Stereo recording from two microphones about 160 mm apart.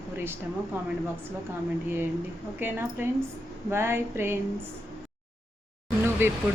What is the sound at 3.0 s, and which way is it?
Speech, 15° right (ahead or behind).